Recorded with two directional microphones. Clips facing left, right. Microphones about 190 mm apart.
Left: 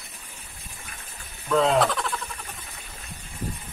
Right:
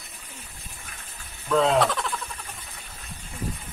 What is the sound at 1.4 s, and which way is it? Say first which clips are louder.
Bleat: even; centre (ahead or behind).